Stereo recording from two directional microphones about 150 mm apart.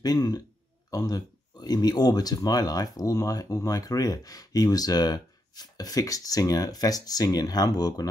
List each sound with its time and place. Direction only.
0.0 s speech: 25° left (ahead or behind)